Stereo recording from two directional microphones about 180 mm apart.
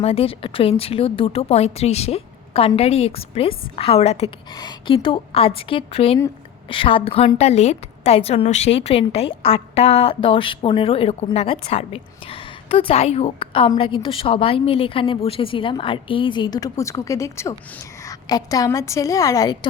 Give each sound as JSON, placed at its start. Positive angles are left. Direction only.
{"t": 0.0, "sound": "a woman's voice", "side_deg": 35}
{"t": 4.5, "sound": "a woman's voice", "side_deg": 25}